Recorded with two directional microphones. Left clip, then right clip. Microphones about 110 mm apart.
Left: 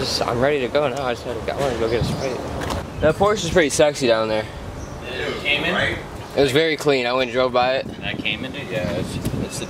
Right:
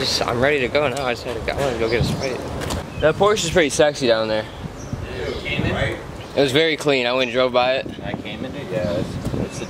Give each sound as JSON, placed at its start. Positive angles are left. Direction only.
{"t": 0.0, "sound": "speech", "side_deg": -5}
{"t": 2.7, "sound": "speech", "side_deg": -15}
{"t": 3.5, "sound": "speech", "side_deg": 0}
{"t": 6.3, "sound": "speech", "side_deg": 0}
{"t": 8.1, "sound": "speech", "side_deg": 40}